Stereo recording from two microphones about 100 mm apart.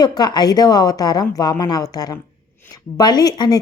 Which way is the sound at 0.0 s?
45° left (ahead or behind).